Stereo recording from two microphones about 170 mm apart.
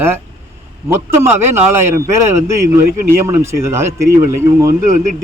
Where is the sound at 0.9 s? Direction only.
15° right (ahead or behind).